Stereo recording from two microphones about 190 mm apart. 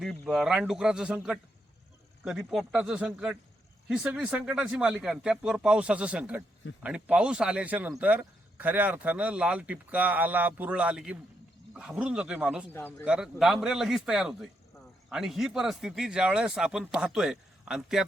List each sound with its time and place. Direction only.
0.0 s speech: centre (ahead or behind)
2.5 s speech: centre (ahead or behind)
12.7 s speech: 10° left (ahead or behind)
13.1 s speech: 5° right (ahead or behind)